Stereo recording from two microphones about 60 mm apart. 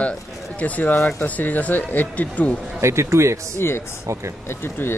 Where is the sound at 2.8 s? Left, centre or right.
Right.